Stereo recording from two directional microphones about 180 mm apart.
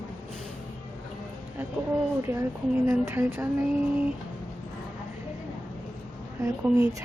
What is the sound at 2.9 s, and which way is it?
Speech, 15° right (ahead or behind).